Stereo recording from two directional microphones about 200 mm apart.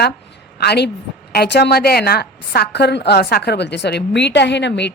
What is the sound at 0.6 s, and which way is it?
A woman's voice, 55° left (ahead or behind).